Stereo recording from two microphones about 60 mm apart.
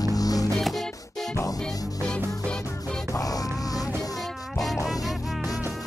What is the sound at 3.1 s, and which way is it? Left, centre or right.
Music, left.